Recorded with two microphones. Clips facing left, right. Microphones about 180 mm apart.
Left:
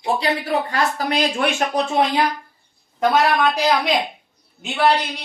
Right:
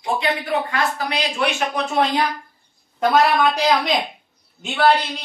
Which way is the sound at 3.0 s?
Centre (ahead or behind).